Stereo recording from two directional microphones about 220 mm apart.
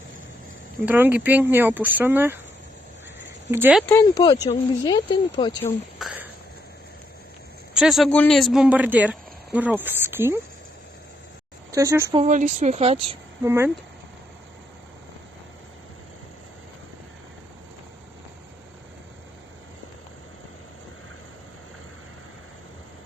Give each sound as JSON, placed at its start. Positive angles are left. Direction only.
{"t": 0.9, "sound": "speech", "side_deg": -10}
{"t": 3.5, "sound": "speech", "side_deg": -5}
{"t": 3.8, "sound": "speech", "side_deg": 15}
{"t": 6.0, "sound": "a sound", "side_deg": -5}
{"t": 7.7, "sound": "speech", "side_deg": 0}
{"t": 11.7, "sound": "speech", "side_deg": -15}
{"t": 12.2, "sound": "speech", "side_deg": -35}
{"t": 13.4, "sound": "speech", "side_deg": -10}